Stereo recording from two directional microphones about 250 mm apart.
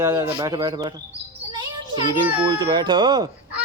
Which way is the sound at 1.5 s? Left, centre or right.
Centre.